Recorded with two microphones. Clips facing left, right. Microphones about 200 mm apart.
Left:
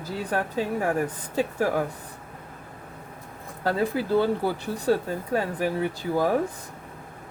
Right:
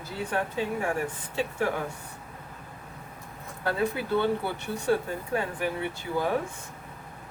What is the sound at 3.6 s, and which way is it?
Speech, 35° left (ahead or behind).